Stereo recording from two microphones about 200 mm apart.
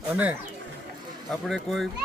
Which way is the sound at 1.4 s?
Centre (ahead or behind).